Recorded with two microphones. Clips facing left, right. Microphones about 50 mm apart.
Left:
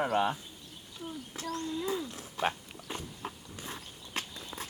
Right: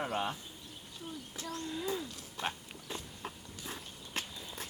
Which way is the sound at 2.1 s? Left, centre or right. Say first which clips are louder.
Left 6 dB; left.